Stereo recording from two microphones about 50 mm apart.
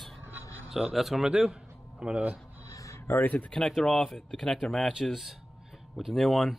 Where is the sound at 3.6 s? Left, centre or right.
Centre.